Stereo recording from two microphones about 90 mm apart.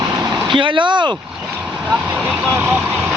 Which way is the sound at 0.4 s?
65° right (ahead or behind).